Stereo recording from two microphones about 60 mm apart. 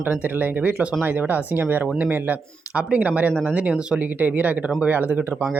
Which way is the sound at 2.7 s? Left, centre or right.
Right.